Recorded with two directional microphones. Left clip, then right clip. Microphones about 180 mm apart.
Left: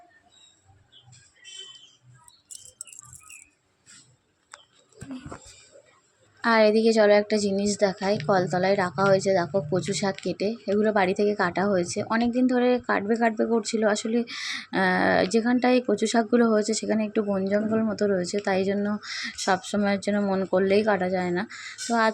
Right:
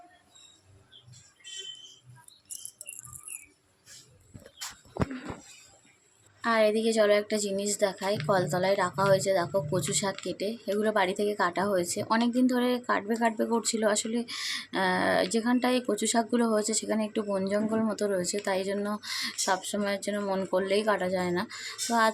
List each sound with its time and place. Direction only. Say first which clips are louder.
6.4 s a woman's voice: left 5 dB; 30° left (ahead or behind)